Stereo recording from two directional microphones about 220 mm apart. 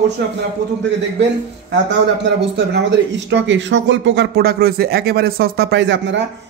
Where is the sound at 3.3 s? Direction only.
55° right (ahead or behind).